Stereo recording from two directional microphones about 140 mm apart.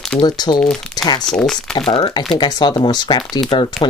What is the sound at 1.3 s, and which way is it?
Speech, 5° left (ahead or behind).